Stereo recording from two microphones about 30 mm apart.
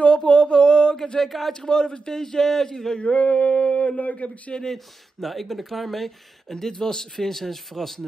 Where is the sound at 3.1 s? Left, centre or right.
Left.